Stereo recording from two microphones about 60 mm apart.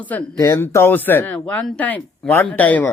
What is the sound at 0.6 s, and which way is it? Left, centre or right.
Speech, left.